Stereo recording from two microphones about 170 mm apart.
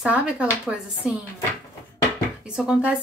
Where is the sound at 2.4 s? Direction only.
5° right (ahead or behind).